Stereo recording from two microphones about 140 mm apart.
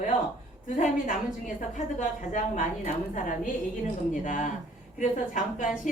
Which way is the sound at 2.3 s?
65° left (ahead or behind).